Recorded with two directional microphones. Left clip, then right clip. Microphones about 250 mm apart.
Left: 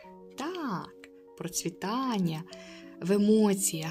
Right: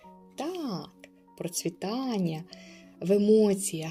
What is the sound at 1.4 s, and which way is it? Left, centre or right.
Speech, centre.